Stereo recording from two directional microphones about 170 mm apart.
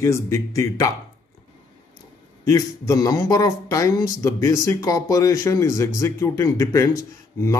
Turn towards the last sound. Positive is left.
turn(degrees=15)  # may be behind; listen again after turning